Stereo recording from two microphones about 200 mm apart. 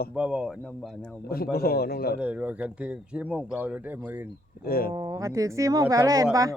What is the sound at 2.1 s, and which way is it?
Speech, 5° right (ahead or behind).